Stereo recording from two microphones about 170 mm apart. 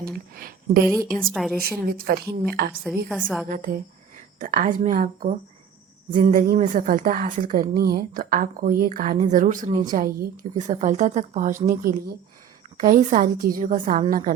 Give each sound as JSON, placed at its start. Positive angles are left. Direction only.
{"t": 0.3, "sound": "a sound", "side_deg": -60}
{"t": 1.3, "sound": "a woman's voice", "side_deg": 0}
{"t": 1.9, "sound": "a woman's voice", "side_deg": -65}
{"t": 3.1, "sound": "a woman's voice", "side_deg": -5}
{"t": 3.5, "sound": "a woman's voice", "side_deg": -55}